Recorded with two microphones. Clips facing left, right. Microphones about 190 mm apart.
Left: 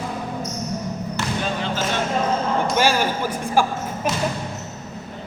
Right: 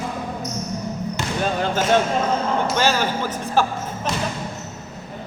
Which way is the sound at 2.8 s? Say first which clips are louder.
Left 2 dB; 10° left (ahead or behind).